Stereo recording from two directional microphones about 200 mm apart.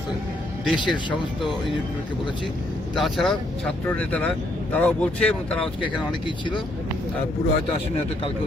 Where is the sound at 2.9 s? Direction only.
Centre (ahead or behind).